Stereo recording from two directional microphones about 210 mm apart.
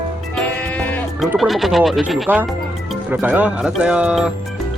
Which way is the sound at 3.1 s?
10° right (ahead or behind).